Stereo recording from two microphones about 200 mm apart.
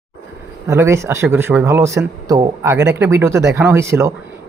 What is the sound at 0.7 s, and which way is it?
A man's voice, 15° right (ahead or behind).